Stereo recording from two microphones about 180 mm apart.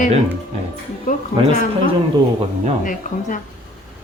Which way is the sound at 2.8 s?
50° left (ahead or behind).